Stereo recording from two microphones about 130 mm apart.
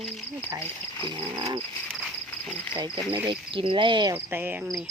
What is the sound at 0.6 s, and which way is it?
Speech, 20° left (ahead or behind).